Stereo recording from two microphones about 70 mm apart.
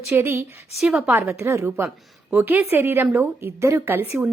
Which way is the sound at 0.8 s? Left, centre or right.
Centre.